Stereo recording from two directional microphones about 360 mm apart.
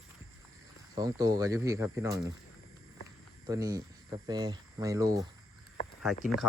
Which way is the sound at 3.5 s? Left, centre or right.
Centre.